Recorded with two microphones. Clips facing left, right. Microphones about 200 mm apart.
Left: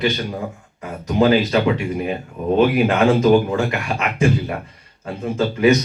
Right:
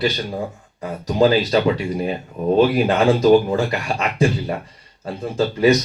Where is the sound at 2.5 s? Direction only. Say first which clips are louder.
Even; 35° right (ahead or behind).